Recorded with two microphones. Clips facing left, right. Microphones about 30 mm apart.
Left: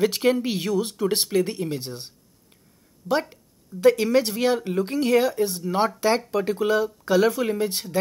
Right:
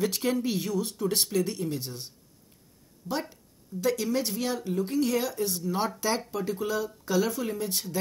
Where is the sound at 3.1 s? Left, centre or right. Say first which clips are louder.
Left 8 dB; centre.